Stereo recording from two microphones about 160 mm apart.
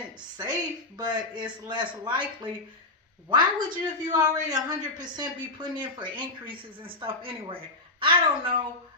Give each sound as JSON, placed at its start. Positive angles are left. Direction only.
{"t": 0.2, "sound": "speech", "side_deg": -25}